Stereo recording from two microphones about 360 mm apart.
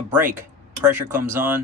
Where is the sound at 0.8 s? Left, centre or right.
Centre.